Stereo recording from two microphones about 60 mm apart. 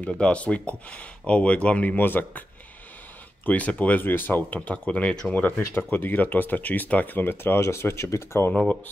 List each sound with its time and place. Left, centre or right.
0.0 s speech: left
3.4 s speech: left
4.6 s speech: left